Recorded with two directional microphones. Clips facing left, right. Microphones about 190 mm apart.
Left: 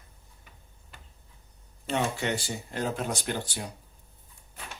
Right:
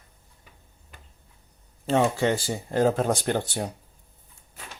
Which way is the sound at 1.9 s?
45° right (ahead or behind).